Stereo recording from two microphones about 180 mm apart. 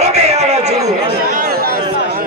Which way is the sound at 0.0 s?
40° right (ahead or behind).